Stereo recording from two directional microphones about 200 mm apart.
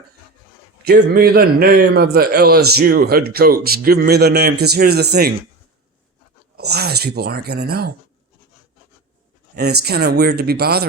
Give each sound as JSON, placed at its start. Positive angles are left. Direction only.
{"t": 0.9, "sound": "a man's voice", "side_deg": -55}
{"t": 6.6, "sound": "a man's voice", "side_deg": -55}
{"t": 9.6, "sound": "a man's voice", "side_deg": -55}